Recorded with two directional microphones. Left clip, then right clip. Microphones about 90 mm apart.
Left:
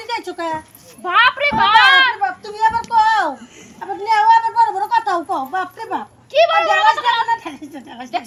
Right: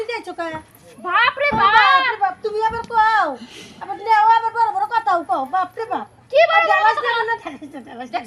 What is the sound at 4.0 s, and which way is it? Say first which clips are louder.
Speech: left 2 dB; 35° right (ahead or behind).